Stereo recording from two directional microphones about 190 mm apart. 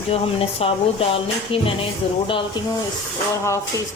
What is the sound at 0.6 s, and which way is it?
Speech, 30° left (ahead or behind).